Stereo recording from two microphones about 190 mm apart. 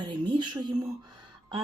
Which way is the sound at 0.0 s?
25° right (ahead or behind).